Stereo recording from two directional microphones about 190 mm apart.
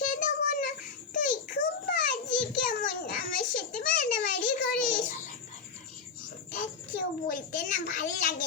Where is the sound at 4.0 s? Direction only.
45° left (ahead or behind).